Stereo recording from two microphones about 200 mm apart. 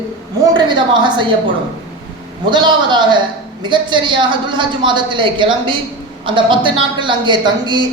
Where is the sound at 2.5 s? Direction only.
25° right (ahead or behind).